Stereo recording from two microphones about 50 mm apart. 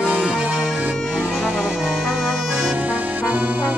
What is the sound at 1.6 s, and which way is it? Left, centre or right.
Music, centre.